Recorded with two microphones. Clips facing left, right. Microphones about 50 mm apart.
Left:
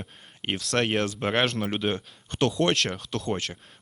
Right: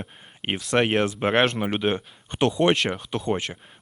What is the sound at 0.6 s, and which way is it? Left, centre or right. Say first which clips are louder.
Speech: right 4 dB; centre.